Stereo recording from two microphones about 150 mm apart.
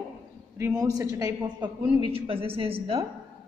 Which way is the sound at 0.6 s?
20° right (ahead or behind).